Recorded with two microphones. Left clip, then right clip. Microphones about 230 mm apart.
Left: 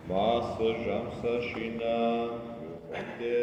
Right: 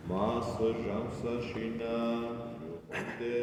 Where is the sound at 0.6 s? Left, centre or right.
Centre.